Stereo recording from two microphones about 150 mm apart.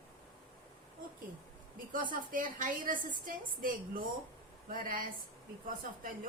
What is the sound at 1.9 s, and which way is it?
A woman's voice, 65° right (ahead or behind).